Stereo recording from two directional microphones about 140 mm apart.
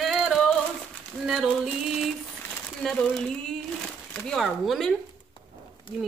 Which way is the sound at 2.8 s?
5° left (ahead or behind).